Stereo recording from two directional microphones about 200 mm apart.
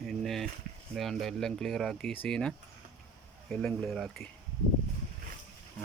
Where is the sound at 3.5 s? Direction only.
5° left (ahead or behind).